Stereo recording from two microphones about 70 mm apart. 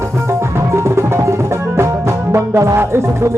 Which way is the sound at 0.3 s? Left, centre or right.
Right.